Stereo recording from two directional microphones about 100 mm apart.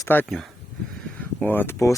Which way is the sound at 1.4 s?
20° left (ahead or behind).